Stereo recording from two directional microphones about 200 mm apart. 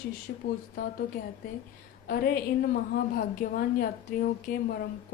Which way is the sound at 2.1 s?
50° left (ahead or behind).